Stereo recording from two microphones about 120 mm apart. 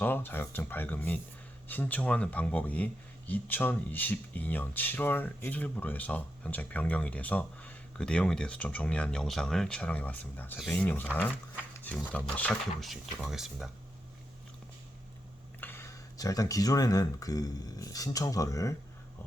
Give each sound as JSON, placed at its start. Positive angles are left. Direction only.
{"t": 0.0, "sound": "speech", "side_deg": 15}
{"t": 12.8, "sound": "speech", "side_deg": 0}
{"t": 15.6, "sound": "speech", "side_deg": 20}